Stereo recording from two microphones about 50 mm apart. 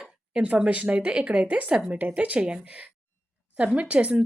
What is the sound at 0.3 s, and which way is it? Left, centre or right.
A woman's voice, right.